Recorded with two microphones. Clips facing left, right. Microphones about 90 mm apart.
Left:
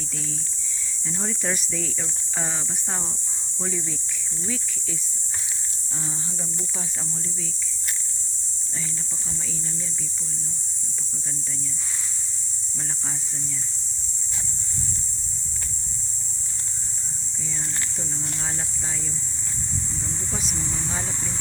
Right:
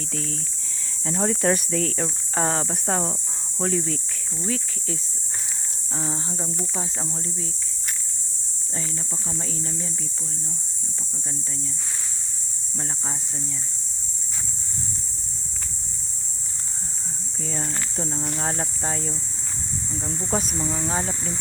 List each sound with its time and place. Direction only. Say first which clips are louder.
1.0 s speech: right 8 dB; 60° right (ahead or behind)
2.0 s speech: right 8 dB; 50° right (ahead or behind); by 3.2 s 85° right
3.6 s speech: right 7 dB; 60° right (ahead or behind)
4.4 s speech: right 4 dB; 45° right (ahead or behind)
6.0 s speech: right 6 dB; 35° right (ahead or behind)
17.6 s speech: right 6 dB; 40° right (ahead or behind)
20.3 s speech: right 10 dB; 50° right (ahead or behind)
20.8 s speech: right 5 dB; 30° right (ahead or behind)